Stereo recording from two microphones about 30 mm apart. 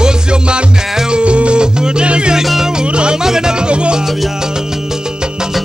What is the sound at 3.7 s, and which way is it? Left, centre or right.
Music, right.